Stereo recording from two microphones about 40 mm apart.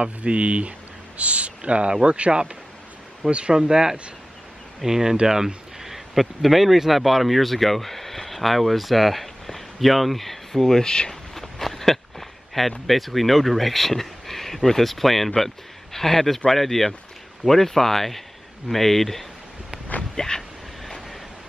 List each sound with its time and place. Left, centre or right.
0.0 s speech: right
3.5 s speech: centre; by 11.1 s left
11.3 s speech: centre
20.2 s vehicle: centre